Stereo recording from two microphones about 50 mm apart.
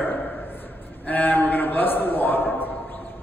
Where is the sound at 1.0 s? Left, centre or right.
Left.